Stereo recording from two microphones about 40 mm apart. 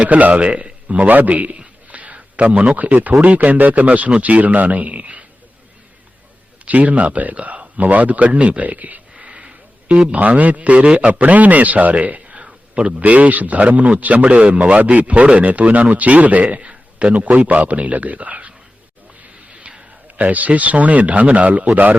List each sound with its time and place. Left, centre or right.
0.0 s a man's voice: right
1.9 s a sound: right
3.2 s a man's voice: right
6.7 s a man's voice: right
9.1 s a sound: right
10.1 s a man's voice: right
11.1 s a man's voice: right
19.6 s a sound: right
20.1 s a man's voice: right